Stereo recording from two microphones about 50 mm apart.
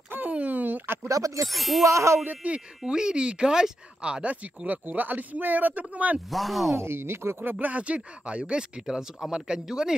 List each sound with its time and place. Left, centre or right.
0.3 s a sound: right
1.0 s speech: right
1.5 s speech: centre
1.9 s speech: right
2.2 s speech: right
2.8 s speech: centre
6.3 s speech: centre
6.8 s speech: right
7.5 s speech: right
8.8 s speech: centre